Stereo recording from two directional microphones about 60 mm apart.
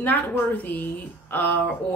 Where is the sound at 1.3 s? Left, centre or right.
Left.